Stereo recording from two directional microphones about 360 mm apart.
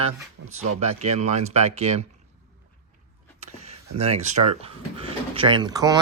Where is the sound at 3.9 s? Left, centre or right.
Centre.